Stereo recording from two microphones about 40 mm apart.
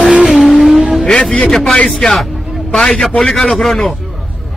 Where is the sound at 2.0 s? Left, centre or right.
Centre.